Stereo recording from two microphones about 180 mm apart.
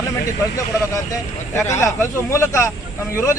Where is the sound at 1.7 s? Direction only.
15° left (ahead or behind).